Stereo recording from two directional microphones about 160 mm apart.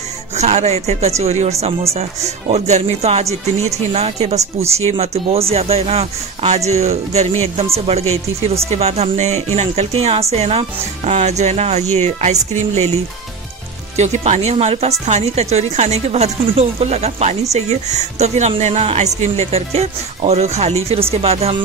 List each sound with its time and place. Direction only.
0.4 s a man's voice: 45° right (ahead or behind)